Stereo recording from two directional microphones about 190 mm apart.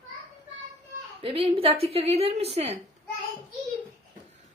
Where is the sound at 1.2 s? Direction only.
30° right (ahead or behind).